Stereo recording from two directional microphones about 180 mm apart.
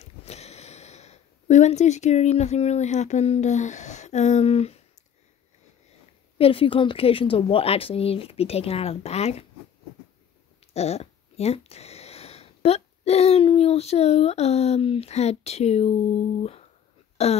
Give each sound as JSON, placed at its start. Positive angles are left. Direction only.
{"t": 0.0, "sound": "speech", "side_deg": 35}
{"t": 6.3, "sound": "a woman's voice", "side_deg": 30}
{"t": 10.7, "sound": "a woman's voice", "side_deg": 35}